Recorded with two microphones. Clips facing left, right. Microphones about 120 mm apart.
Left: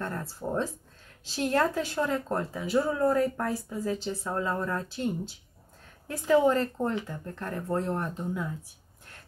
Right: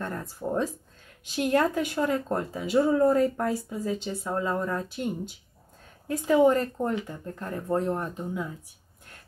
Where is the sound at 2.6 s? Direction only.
20° right (ahead or behind).